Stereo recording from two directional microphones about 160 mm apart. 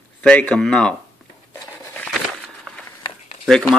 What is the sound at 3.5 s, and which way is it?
Speech, 5° left (ahead or behind).